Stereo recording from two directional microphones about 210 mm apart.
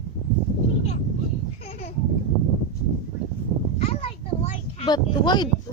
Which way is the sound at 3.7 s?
30° left (ahead or behind).